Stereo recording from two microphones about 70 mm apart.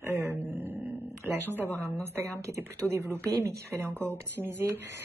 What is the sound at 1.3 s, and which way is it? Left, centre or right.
Speech, right.